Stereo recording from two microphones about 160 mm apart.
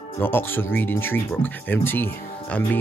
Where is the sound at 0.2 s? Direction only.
15° left (ahead or behind).